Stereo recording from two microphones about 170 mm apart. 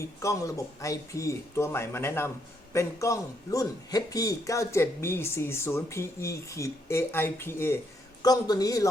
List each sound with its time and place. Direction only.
0.0 s a man's voice: 20° left (ahead or behind)